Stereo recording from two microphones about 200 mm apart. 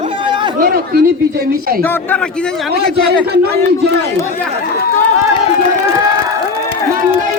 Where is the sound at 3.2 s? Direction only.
55° right (ahead or behind).